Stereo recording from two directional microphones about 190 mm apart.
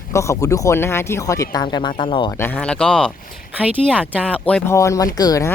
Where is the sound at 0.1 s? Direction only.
15° left (ahead or behind).